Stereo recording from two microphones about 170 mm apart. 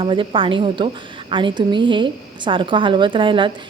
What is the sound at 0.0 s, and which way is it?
A woman's voice, 30° right (ahead or behind).